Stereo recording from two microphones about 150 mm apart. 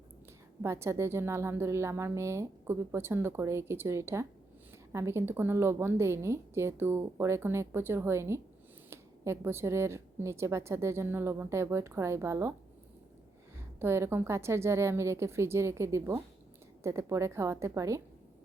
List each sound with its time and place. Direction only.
0.6 s a woman's voice: 15° right (ahead or behind)
13.7 s a woman's voice: 15° right (ahead or behind)